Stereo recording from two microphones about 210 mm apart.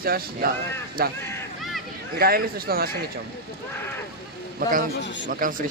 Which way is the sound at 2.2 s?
45° right (ahead or behind).